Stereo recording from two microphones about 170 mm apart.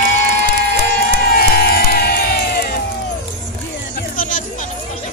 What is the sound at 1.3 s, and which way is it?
Crowd, 60° left (ahead or behind).